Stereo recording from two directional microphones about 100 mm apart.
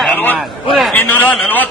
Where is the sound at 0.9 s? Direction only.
20° left (ahead or behind).